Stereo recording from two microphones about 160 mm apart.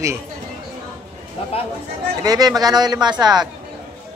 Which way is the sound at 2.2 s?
25° right (ahead or behind).